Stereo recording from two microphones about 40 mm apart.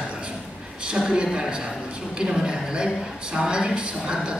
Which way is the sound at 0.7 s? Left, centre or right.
Right.